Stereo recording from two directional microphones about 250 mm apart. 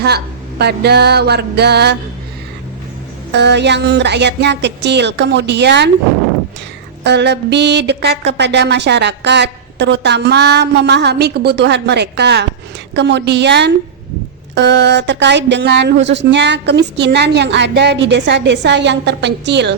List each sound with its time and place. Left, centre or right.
0.6 s music: right
3.3 s a woman's voice: right
7.0 s a woman's voice: right